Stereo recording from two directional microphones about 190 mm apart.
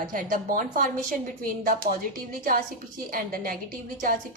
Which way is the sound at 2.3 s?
50° right (ahead or behind).